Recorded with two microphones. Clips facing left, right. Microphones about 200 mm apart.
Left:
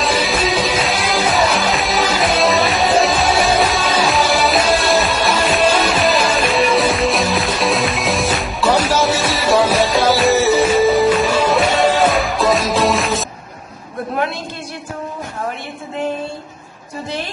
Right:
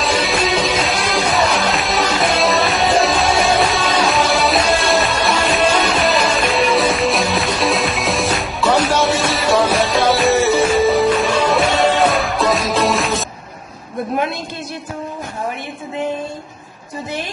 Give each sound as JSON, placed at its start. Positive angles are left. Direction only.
{"t": 0.0, "sound": "music", "side_deg": 0}